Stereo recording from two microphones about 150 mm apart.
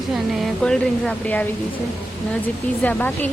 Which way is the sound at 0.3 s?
Centre (ahead or behind).